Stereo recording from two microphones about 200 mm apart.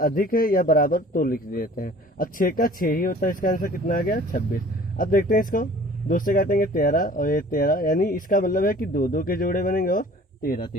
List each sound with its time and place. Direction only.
0.0 s a man's voice: 45° left (ahead or behind)